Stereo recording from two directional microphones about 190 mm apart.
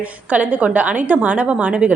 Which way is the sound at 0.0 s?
10° right (ahead or behind).